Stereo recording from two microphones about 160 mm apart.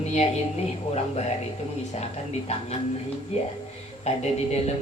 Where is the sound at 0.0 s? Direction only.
45° left (ahead or behind).